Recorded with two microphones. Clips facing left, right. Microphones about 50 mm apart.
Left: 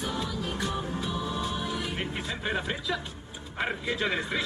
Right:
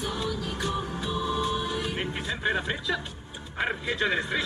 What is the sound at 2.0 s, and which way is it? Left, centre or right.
Music, centre.